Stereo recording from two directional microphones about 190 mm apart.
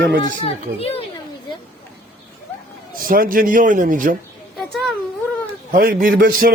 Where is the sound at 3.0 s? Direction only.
50° right (ahead or behind).